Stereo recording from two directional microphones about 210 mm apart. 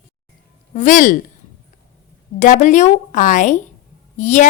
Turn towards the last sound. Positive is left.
turn(degrees=35)  # may be behind; listen again after turning